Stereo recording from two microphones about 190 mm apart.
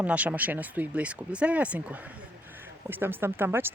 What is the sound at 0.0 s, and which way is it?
Speech, 5° right (ahead or behind).